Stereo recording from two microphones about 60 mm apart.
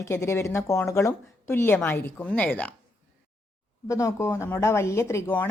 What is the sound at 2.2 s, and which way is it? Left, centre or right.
Speech, left.